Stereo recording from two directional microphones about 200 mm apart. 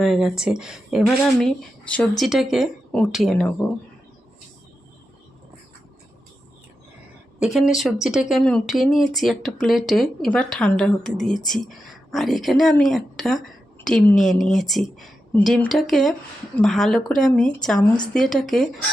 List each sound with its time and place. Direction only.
0.0 s a woman's voice: centre (ahead or behind)
7.3 s a woman's voice: centre (ahead or behind)